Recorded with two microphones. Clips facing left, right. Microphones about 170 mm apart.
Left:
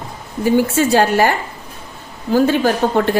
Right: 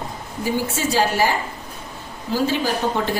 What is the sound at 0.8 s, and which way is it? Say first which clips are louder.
A woman's voice: left 6 dB; 60° left (ahead or behind).